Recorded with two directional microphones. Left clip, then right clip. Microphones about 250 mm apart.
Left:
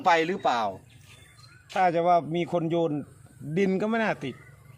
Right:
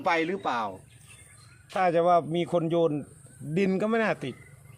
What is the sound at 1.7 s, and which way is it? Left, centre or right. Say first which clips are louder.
Speech: even; centre.